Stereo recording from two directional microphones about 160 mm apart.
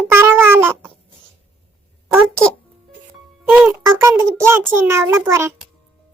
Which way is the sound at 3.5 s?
10° right (ahead or behind).